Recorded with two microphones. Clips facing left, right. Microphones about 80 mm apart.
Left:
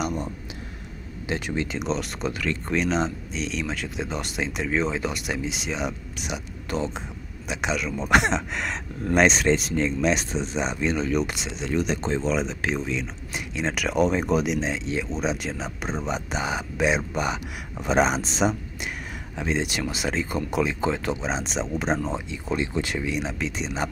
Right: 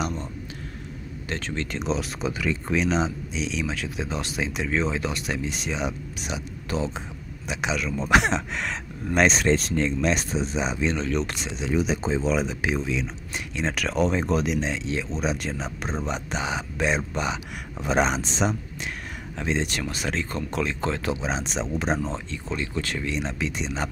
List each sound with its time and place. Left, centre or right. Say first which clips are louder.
1.2 s speech: left 3 dB; centre
23.0 s speech: even; centre